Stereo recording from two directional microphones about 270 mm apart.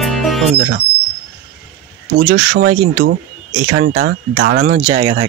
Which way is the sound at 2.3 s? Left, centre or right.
Right.